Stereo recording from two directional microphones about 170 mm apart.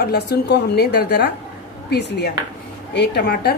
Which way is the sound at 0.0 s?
75° left (ahead or behind).